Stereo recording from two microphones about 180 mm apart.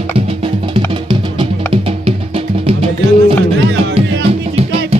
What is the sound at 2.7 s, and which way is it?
Music, 30° right (ahead or behind).